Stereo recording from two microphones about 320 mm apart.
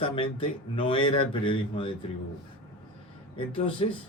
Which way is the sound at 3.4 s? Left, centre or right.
Centre.